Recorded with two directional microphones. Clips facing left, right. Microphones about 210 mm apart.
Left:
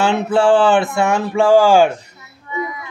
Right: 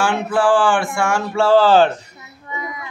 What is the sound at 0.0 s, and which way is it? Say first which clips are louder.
Speech: left 3 dB; 25° left (ahead or behind).